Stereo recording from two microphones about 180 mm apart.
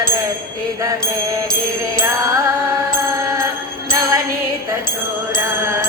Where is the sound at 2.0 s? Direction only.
20° right (ahead or behind).